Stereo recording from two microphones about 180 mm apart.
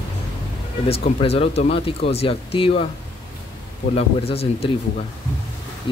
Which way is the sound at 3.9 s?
35° left (ahead or behind).